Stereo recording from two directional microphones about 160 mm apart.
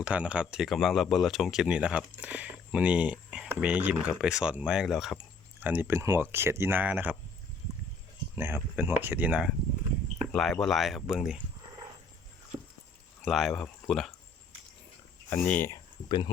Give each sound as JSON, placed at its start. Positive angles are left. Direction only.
{"t": 0.0, "sound": "speech", "side_deg": -5}
{"t": 5.6, "sound": "speech", "side_deg": -10}
{"t": 8.4, "sound": "speech", "side_deg": -15}
{"t": 10.3, "sound": "speech", "side_deg": 5}
{"t": 13.2, "sound": "speech", "side_deg": 0}
{"t": 15.4, "sound": "speech", "side_deg": 10}
{"t": 16.0, "sound": "speech", "side_deg": 30}